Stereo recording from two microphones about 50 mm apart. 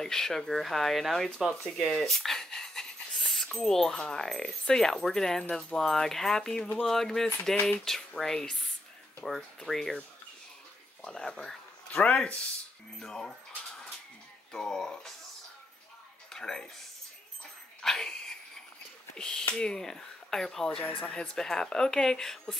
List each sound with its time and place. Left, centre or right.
0.0 s speech: centre
11.1 s speech: centre
13.0 s speech: centre
14.5 s speech: centre
16.3 s a sound: centre
17.8 s dog: centre
19.1 s speech: centre
20.9 s speech: left
21.4 s speech: centre